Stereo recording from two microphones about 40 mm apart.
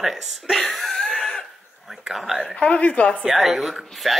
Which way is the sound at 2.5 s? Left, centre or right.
Left.